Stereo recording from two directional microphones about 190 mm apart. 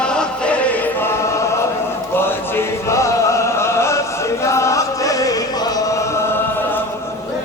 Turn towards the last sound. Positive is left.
turn(degrees=15)  # may be behind; listen again after turning